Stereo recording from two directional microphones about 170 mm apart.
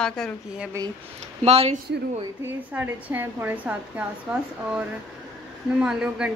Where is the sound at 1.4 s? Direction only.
40° right (ahead or behind).